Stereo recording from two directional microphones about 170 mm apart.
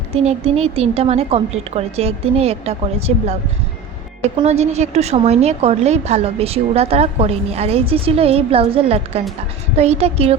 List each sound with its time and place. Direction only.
0.1 s a woman's voice: 35° right (ahead or behind)
4.4 s a woman's voice: 40° right (ahead or behind)